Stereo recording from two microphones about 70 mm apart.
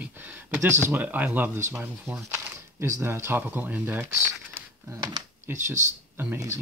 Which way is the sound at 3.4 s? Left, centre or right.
Right.